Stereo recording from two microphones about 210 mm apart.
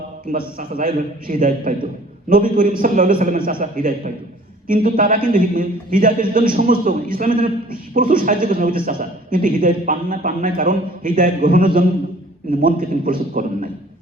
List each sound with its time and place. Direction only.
0.3 s a man's voice: 40° right (ahead or behind)